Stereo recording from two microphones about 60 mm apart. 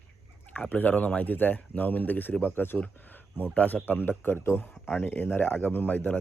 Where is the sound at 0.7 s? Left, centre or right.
Left.